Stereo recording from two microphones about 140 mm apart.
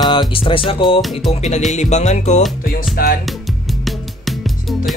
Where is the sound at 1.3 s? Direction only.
55° left (ahead or behind).